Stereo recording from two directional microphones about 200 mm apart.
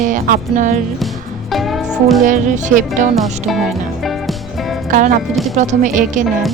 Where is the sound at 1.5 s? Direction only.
Centre (ahead or behind).